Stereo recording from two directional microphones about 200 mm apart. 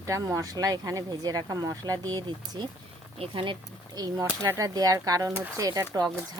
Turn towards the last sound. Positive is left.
turn(degrees=-20)  # may be behind; listen again after turning